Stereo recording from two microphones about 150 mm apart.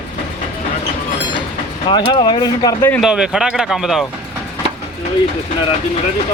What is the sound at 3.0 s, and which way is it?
Speech, 5° right (ahead or behind).